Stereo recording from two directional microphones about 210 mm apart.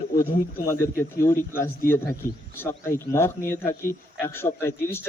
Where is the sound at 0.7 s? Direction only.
10° left (ahead or behind).